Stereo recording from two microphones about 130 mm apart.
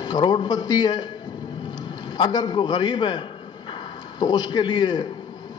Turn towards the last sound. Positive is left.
turn(degrees=35)  # may be behind; listen again after turning